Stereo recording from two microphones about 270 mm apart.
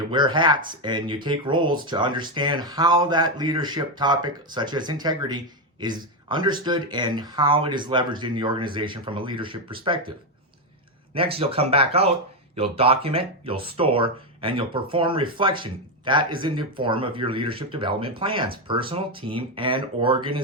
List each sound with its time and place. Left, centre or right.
0.1 s speech: centre
11.1 s speech: centre